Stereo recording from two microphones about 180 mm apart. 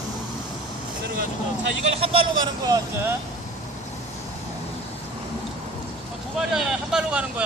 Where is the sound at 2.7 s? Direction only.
20° right (ahead or behind).